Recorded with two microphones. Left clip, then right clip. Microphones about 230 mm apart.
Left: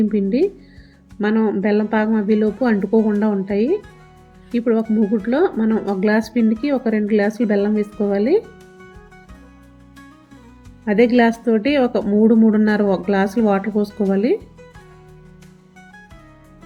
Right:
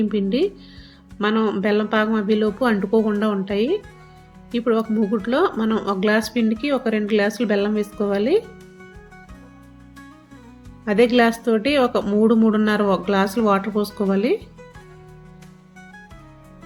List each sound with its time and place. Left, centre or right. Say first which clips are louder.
0.0 s a woman's voice: left 3 dB; centre
10.9 s speech: left 1 dB; right
11.2 s a woman's voice: left 1 dB; centre